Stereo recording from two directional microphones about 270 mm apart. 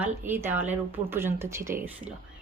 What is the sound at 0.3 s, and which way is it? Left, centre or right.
Speech, centre.